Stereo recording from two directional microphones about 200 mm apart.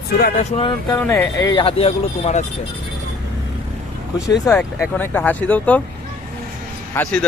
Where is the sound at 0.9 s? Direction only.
10° left (ahead or behind); by 2.4 s 30° left (ahead or behind).